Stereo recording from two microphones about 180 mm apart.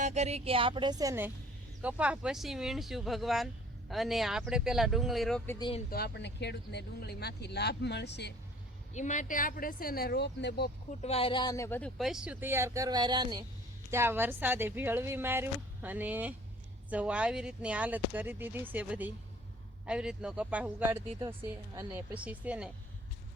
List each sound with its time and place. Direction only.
0.0 s a woman's voice: 40° right (ahead or behind); by 5.4 s centre (ahead or behind)
5.5 s speech: 25° left (ahead or behind)
5.9 s speech: 70° left (ahead or behind)
8.9 s speech: 40° left (ahead or behind); by 10.7 s 65° left (ahead or behind)
11.0 s speech: 35° left (ahead or behind); by 11.9 s 15° left (ahead or behind)
11.9 s speech: centre (ahead or behind); by 13.4 s 25° right (ahead or behind)
13.9 s speech: 15° right (ahead or behind)